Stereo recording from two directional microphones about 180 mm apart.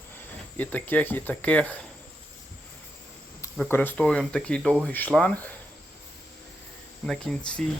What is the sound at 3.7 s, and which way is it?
Speech, 10° left (ahead or behind).